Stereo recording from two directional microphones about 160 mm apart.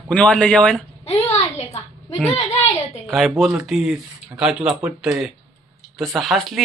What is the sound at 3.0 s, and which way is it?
Speech, centre (ahead or behind).